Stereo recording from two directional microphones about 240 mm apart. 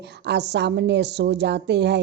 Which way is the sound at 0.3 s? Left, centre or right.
Right.